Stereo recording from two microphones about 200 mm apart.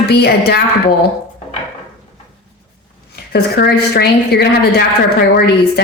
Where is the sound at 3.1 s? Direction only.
55° left (ahead or behind).